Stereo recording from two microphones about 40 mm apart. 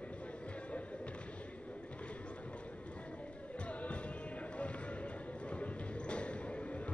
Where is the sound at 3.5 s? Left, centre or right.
Left.